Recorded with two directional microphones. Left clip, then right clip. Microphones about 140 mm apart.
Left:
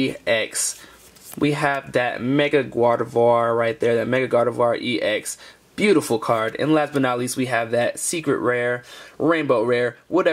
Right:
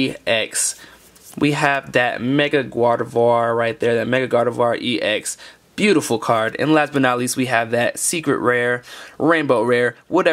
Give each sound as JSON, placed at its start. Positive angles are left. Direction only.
{"t": 0.1, "sound": "speech", "side_deg": -20}
{"t": 2.3, "sound": "speech", "side_deg": -15}